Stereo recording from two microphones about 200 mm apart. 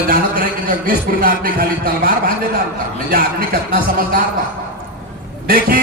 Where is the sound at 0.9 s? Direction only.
45° right (ahead or behind).